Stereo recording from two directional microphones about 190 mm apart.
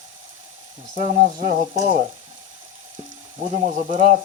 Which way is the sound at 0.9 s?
40° right (ahead or behind).